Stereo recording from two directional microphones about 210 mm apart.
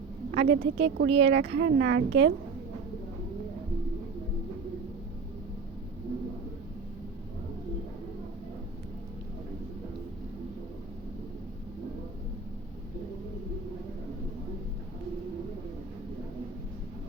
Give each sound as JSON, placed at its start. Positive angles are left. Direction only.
{"t": 0.3, "sound": "a woman's voice", "side_deg": -50}